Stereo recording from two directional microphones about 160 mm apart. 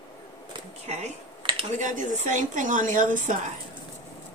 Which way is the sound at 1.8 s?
50° right (ahead or behind).